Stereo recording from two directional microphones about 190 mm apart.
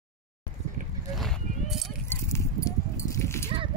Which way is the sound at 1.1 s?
Centre (ahead or behind).